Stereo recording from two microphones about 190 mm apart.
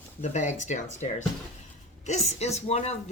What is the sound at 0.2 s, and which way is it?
Speech, 40° left (ahead or behind).